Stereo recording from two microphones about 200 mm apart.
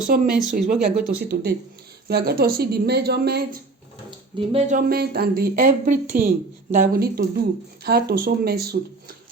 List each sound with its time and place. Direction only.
0.1 s speech: 45° right (ahead or behind)
1.2 s speech: 55° right (ahead or behind)
4.4 s speech: 30° right (ahead or behind)
4.9 s speech: 50° right (ahead or behind)